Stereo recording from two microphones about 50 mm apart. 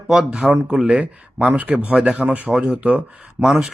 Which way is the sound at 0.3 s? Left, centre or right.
Centre.